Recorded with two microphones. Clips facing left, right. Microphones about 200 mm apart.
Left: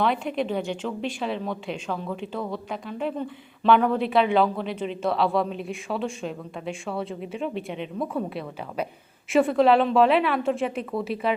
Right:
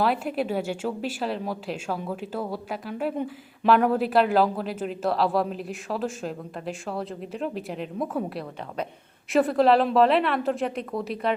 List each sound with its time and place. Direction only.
0.0 s speech: 5° right (ahead or behind)